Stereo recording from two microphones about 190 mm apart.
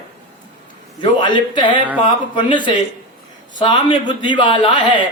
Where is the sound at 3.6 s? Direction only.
25° left (ahead or behind).